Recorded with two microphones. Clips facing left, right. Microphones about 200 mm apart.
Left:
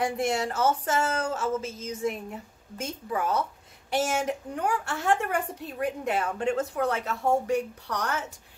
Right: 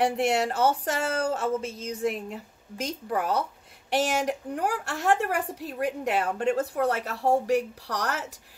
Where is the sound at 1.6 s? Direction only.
65° right (ahead or behind).